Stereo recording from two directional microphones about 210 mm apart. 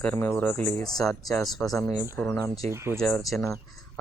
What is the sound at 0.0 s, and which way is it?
Speech, 10° left (ahead or behind).